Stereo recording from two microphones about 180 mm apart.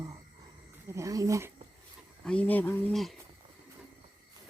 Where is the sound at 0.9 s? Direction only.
15° right (ahead or behind).